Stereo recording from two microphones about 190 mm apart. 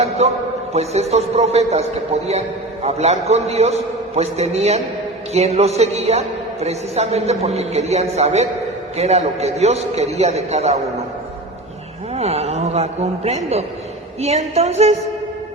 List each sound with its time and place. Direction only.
0.2 s a man's voice: 35° right (ahead or behind)
2.8 s a man's voice: 35° right (ahead or behind)
12.1 s a man's voice: 35° right (ahead or behind)